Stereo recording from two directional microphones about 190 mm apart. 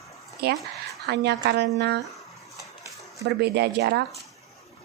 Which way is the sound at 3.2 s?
60° right (ahead or behind).